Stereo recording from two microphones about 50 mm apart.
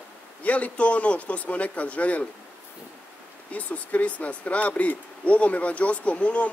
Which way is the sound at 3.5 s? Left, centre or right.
Left.